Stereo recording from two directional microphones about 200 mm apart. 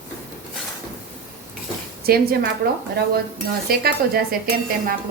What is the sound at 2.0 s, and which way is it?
Speech, 50° right (ahead or behind).